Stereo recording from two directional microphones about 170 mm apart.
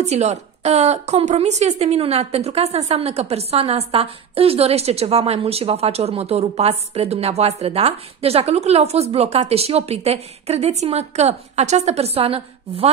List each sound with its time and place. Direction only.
0.0 s a woman's voice: 40° right (ahead or behind)